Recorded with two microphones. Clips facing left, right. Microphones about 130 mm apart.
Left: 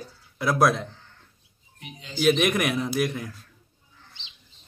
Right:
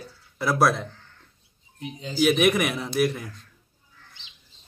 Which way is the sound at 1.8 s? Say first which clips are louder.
Right 8 dB; 35° right (ahead or behind).